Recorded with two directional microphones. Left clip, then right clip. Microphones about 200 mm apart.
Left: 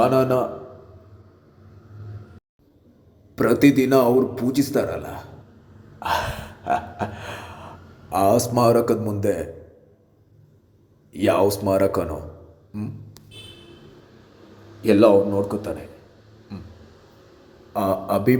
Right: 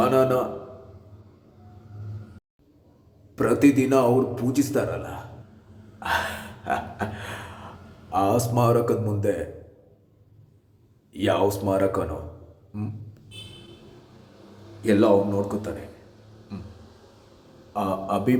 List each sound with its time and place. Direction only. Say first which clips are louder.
0.0 s a man's voice: left 2 dB; 10° left (ahead or behind)
3.3 s a man's voice: left 3 dB; 15° left (ahead or behind)
6.0 s gasp: left 2 dB; 10° left (ahead or behind)
8.1 s a man's voice: left 4 dB; 15° left (ahead or behind)
11.1 s a man's voice: left 4 dB; 15° left (ahead or behind)
14.8 s a man's voice: left 4 dB; 10° left (ahead or behind)
16.5 s a sound: left 1 dB; 5° left (ahead or behind)
17.7 s a man's voice: left 4 dB; 15° left (ahead or behind)